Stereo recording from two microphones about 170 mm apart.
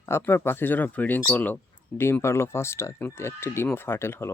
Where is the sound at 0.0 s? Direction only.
15° left (ahead or behind).